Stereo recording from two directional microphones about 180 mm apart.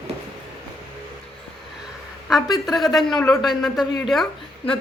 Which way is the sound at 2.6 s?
Centre (ahead or behind).